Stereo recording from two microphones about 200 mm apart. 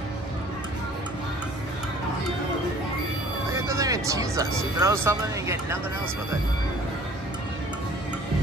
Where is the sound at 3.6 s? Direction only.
15° right (ahead or behind).